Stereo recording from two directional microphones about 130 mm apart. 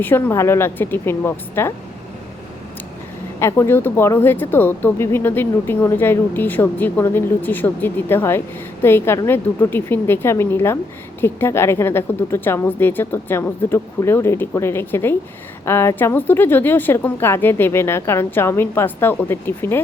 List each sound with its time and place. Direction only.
0.0 s speech: 20° left (ahead or behind)
3.4 s a woman's voice: 20° left (ahead or behind)